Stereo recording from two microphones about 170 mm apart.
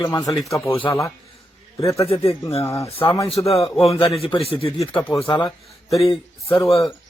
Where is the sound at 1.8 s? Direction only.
20° left (ahead or behind).